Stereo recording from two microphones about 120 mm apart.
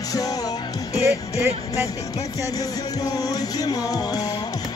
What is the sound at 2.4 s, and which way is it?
Music, 30° left (ahead or behind).